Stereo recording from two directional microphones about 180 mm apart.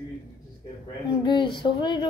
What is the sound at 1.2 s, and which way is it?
Speech, 25° left (ahead or behind).